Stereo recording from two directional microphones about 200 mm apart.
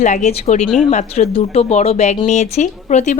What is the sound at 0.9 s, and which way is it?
A woman's voice, 35° left (ahead or behind).